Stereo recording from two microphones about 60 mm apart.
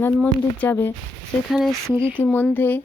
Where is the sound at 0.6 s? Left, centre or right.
Left.